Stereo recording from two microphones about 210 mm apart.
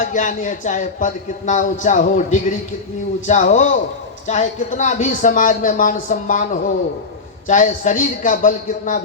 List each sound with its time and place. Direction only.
0.0 s speech: 40° left (ahead or behind)